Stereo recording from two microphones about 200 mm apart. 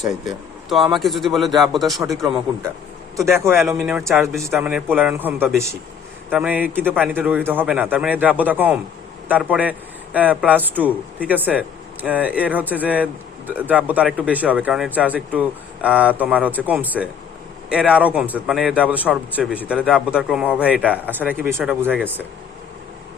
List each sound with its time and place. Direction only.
0.3 s a man's voice: centre (ahead or behind)
3.2 s a man's voice: 15° right (ahead or behind)
4.4 s a man's voice: 15° right (ahead or behind)